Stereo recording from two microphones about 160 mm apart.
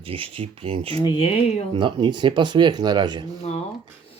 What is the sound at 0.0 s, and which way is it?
Speech, 35° right (ahead or behind).